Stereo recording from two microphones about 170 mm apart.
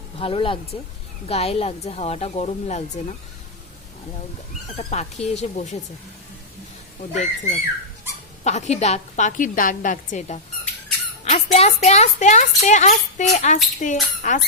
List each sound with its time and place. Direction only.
0.2 s a woman's voice: 30° left (ahead or behind)
4.8 s a woman's voice: 40° left (ahead or behind)
7.1 s speech: 45° left (ahead or behind)